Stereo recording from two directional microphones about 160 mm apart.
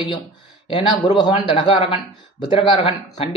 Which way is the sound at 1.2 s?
30° left (ahead or behind).